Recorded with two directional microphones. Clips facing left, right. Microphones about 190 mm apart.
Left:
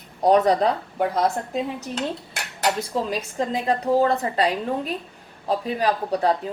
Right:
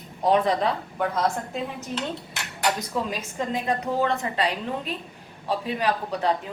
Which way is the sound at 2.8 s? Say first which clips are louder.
Left 3 dB; 35° left (ahead or behind).